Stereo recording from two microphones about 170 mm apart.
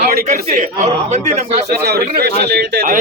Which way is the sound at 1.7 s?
65° right (ahead or behind).